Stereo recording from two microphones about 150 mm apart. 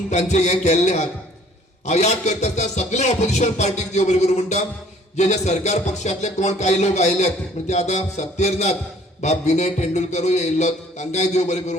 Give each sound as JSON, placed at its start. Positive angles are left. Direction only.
{"t": 0.1, "sound": "music", "side_deg": 50}